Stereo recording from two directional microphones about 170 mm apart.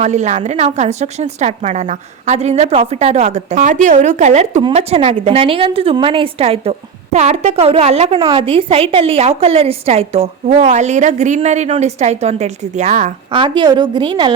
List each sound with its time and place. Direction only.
0.0 s a woman's voice: 45° right (ahead or behind)
13.3 s a woman's voice: 30° right (ahead or behind)